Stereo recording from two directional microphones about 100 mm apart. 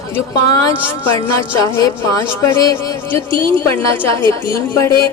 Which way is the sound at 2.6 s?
40° left (ahead or behind).